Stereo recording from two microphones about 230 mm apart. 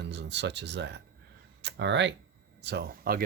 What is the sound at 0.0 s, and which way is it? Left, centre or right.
Speech, right.